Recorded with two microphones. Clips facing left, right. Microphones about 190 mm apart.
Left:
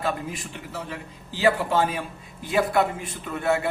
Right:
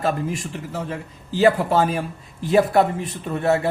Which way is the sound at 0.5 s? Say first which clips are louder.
Right 6 dB; 40° right (ahead or behind).